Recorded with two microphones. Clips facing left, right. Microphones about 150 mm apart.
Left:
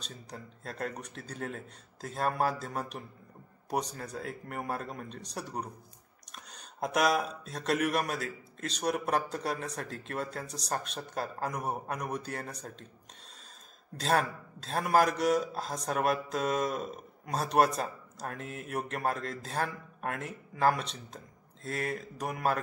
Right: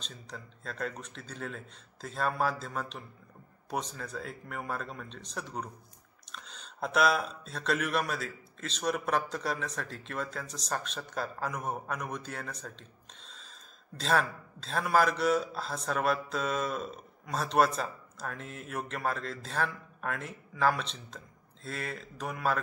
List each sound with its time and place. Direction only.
0.3 s a man's voice: 40° left (ahead or behind)
6.8 s speech: 40° left (ahead or behind)
13.9 s a man's voice: 40° left (ahead or behind)